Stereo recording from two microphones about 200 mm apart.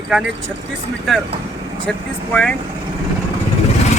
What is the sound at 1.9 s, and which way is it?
Speech, 5° left (ahead or behind).